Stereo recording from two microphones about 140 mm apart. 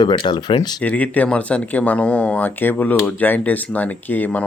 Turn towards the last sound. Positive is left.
turn(degrees=10)  # may be behind; listen again after turning